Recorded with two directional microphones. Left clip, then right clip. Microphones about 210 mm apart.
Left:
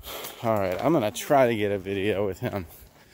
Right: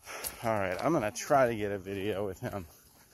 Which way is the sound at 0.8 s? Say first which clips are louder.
Left 5 dB; 20° left (ahead or behind).